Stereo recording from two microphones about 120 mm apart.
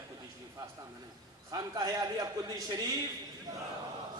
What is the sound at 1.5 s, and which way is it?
A man's voice, 30° right (ahead or behind).